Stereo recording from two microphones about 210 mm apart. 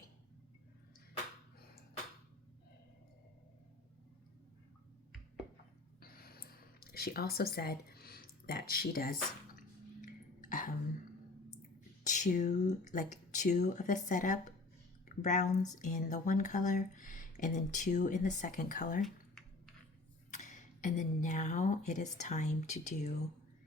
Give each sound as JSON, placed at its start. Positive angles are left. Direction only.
{"t": 6.0, "sound": "a sound", "side_deg": 45}
{"t": 10.0, "sound": "throat clearing", "side_deg": 40}
{"t": 12.0, "sound": "speech", "side_deg": 35}
{"t": 20.3, "sound": "speech", "side_deg": 35}